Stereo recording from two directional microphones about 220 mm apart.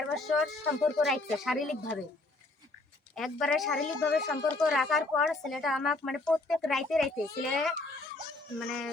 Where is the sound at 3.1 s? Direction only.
Centre (ahead or behind).